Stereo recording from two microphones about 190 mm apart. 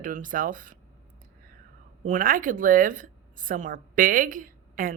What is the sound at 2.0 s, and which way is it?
A woman's voice, 45° right (ahead or behind).